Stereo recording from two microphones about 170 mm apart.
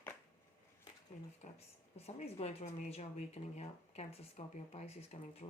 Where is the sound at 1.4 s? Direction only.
40° left (ahead or behind).